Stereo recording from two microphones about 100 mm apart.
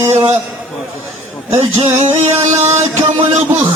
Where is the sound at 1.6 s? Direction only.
60° right (ahead or behind).